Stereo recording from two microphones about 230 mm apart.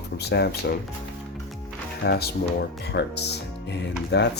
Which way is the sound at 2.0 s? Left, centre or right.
Left.